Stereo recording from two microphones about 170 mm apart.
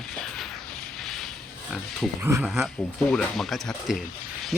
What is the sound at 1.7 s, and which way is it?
Speech, centre (ahead or behind).